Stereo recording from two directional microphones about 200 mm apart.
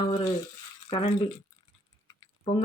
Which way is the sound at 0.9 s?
25° left (ahead or behind).